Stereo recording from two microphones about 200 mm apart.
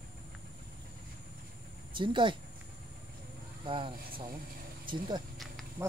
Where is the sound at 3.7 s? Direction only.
25° right (ahead or behind).